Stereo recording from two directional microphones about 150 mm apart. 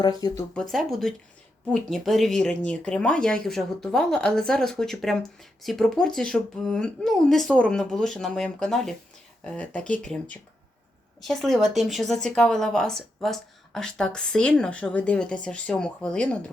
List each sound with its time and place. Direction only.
0.0 s speech: 25° left (ahead or behind)
0.5 s speech: centre (ahead or behind)
11.2 s speech: centre (ahead or behind)